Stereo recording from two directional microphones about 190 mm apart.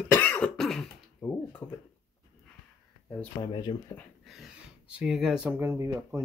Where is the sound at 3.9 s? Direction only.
5° left (ahead or behind).